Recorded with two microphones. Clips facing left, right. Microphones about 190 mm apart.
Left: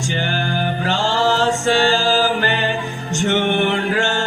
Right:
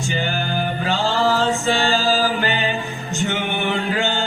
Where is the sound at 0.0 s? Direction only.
75° left (ahead or behind).